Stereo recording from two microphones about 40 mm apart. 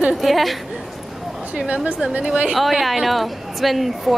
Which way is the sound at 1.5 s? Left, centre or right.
Right.